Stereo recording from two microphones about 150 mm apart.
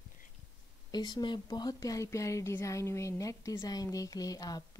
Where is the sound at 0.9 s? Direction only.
30° left (ahead or behind).